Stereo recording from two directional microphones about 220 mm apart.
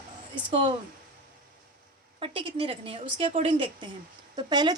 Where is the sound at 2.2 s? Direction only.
25° right (ahead or behind).